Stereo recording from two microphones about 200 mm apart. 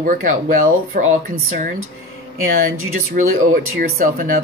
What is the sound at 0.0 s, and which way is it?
Speech, 40° right (ahead or behind).